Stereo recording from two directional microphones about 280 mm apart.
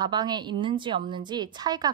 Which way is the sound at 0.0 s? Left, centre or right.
Centre.